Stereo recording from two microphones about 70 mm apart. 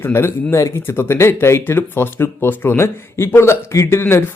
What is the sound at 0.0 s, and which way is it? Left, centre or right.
Speech, left.